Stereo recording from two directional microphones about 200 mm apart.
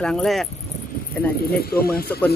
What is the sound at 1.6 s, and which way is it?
Speech, 50° left (ahead or behind).